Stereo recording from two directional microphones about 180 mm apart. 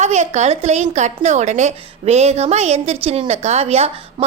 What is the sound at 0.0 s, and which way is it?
A woman's voice, 40° right (ahead or behind).